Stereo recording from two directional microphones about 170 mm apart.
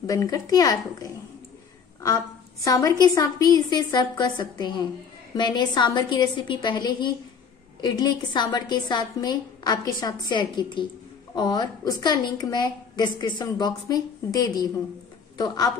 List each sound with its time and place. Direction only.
0.0 s a woman's voice: 20° left (ahead or behind)